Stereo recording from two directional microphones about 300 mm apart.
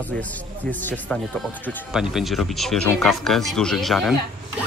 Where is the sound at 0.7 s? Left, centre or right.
Centre.